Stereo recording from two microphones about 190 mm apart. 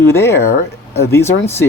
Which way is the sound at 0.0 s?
15° left (ahead or behind).